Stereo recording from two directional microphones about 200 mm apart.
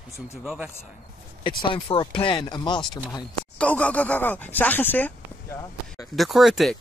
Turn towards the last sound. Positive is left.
turn(degrees=0)  # may be behind; listen again after turning